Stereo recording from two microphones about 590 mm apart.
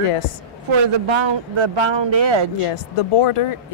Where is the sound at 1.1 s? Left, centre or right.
Right.